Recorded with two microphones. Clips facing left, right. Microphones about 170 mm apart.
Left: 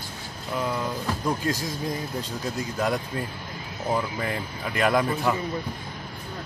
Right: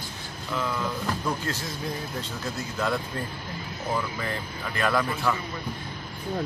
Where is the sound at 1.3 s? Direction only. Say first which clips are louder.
Left 4 dB; 15° left (ahead or behind).